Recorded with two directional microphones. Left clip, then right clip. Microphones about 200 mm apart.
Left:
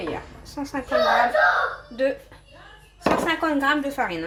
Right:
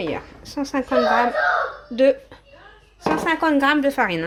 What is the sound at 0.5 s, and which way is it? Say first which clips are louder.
Speech: right 6 dB; 50° right (ahead or behind).